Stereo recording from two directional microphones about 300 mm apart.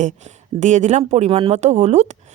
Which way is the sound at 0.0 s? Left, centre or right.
Right.